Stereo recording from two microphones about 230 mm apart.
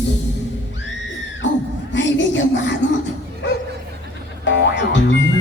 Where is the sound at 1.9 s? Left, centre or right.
Left.